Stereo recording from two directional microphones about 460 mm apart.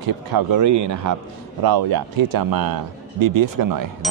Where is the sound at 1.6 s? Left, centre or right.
Right.